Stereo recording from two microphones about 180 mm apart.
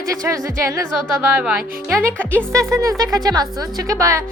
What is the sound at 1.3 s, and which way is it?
Speech, 5° right (ahead or behind).